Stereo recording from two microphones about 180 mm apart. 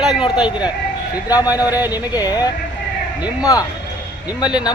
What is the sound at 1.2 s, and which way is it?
A man's voice, 20° left (ahead or behind).